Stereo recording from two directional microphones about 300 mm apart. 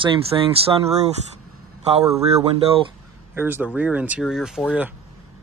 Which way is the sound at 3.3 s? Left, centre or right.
Centre.